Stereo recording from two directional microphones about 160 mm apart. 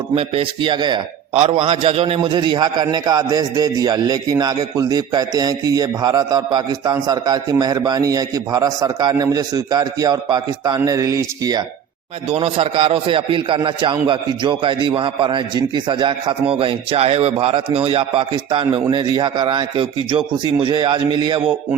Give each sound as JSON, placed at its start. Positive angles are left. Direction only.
{"t": 0.1, "sound": "a man's voice", "side_deg": -35}
{"t": 12.3, "sound": "a man's voice", "side_deg": -35}